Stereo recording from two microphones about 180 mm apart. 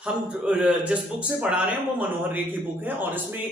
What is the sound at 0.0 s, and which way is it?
A man's voice, 5° right (ahead or behind).